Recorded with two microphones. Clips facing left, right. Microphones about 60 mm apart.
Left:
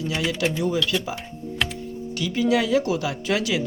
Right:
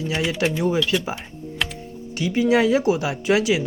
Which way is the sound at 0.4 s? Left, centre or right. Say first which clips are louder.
Right 2 dB; right.